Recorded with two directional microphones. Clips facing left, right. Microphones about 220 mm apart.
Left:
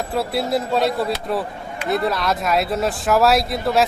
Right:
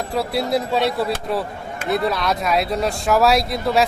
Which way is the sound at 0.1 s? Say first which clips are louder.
Right 1 dB; centre (ahead or behind).